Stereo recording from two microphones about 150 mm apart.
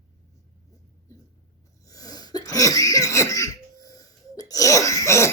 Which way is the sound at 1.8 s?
25° left (ahead or behind).